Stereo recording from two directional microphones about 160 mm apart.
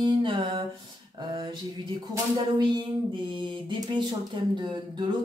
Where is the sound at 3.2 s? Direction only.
30° right (ahead or behind).